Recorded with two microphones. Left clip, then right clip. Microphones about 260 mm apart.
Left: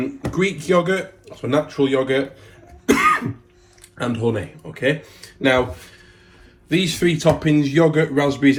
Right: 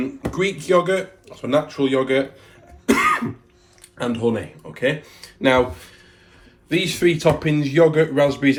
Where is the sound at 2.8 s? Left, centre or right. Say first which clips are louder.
Left 2 dB; right.